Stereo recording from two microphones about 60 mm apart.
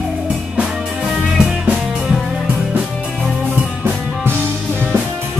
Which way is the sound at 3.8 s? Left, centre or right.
Right.